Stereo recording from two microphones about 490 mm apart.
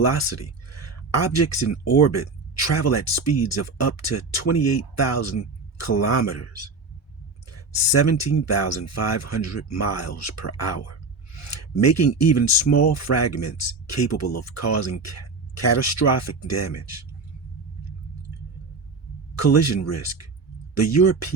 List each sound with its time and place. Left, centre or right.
0.0 s speech: left
7.5 s speech: left
19.4 s speech: left